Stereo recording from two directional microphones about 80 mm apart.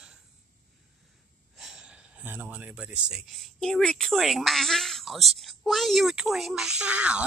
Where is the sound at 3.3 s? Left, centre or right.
Centre.